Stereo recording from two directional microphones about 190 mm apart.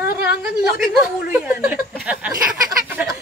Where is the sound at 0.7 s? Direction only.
50° left (ahead or behind).